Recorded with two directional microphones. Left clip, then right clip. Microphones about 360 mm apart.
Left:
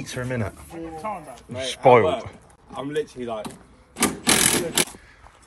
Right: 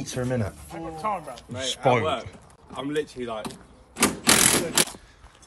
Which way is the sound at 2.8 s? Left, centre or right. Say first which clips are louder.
Left 1 dB; centre.